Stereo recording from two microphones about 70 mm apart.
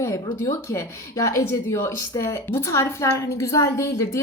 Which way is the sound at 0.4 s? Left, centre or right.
Left.